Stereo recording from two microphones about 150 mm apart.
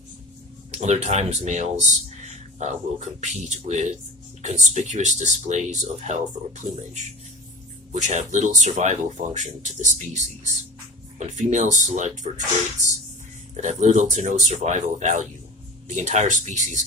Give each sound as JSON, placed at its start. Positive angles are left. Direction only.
{"t": 0.7, "sound": "speech", "side_deg": -50}
{"t": 7.9, "sound": "speech", "side_deg": -50}
{"t": 13.5, "sound": "speech", "side_deg": -50}